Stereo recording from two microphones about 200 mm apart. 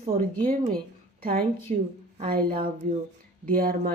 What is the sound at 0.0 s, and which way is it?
Speech, 30° right (ahead or behind).